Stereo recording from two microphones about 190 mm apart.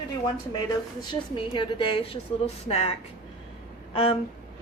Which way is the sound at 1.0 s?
25° left (ahead or behind).